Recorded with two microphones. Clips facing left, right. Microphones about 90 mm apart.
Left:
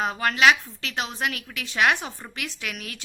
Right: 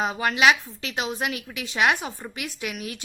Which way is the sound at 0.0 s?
10° right (ahead or behind).